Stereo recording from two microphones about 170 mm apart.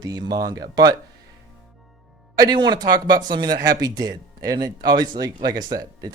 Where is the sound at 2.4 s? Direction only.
25° right (ahead or behind).